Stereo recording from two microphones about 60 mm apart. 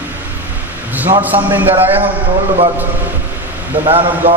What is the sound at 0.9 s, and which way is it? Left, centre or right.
A man's voice, right.